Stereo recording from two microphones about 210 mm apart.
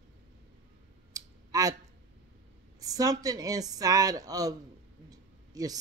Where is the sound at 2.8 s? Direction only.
15° right (ahead or behind).